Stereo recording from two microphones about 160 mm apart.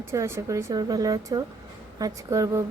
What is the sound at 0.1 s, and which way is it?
A woman's voice, 20° right (ahead or behind).